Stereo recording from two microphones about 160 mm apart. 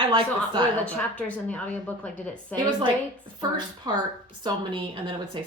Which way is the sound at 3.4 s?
25° right (ahead or behind).